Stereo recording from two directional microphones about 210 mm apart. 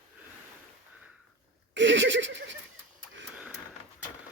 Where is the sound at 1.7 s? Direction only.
60° right (ahead or behind).